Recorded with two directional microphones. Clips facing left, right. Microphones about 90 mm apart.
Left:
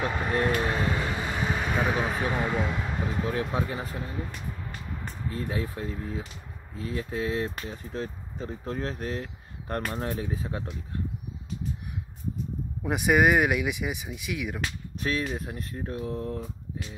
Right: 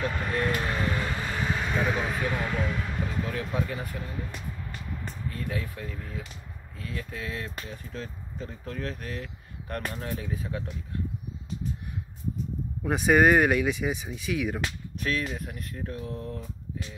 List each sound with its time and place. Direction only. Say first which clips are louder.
0.0 s speech: left 2 dB; 20° left (ahead or behind)
5.3 s speech: left 4 dB; 30° left (ahead or behind)
12.8 s speech: right 1 dB; 10° left (ahead or behind)
15.0 s speech: left 1 dB; 25° left (ahead or behind)